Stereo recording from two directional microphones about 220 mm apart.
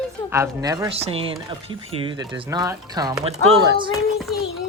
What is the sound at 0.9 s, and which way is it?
Speech, 25° right (ahead or behind).